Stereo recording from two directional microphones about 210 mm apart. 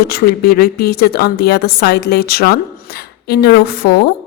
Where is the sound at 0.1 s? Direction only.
45° left (ahead or behind).